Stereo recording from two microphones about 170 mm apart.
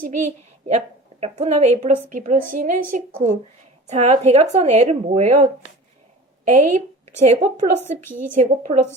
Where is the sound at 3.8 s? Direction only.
40° right (ahead or behind).